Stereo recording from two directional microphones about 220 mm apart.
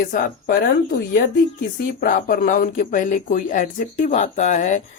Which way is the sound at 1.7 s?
40° left (ahead or behind).